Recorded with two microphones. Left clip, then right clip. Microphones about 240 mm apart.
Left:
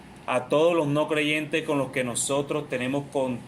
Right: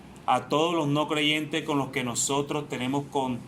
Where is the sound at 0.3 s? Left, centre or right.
Right.